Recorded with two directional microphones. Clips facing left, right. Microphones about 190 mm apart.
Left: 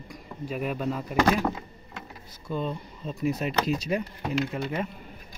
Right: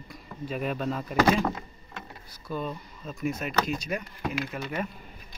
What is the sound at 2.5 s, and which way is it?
Speech, 25° left (ahead or behind).